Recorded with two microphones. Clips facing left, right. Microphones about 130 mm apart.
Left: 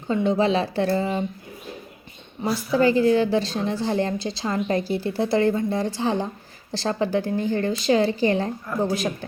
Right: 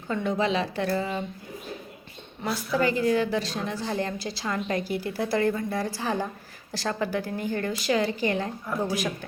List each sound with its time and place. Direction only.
0.1 s speech: 25° left (ahead or behind)
2.5 s speech: centre (ahead or behind)
2.7 s a woman's voice: 30° left (ahead or behind)